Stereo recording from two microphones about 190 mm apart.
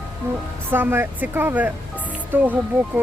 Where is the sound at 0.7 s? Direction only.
10° right (ahead or behind).